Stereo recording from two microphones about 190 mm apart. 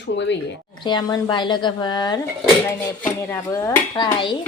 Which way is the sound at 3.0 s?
10° left (ahead or behind).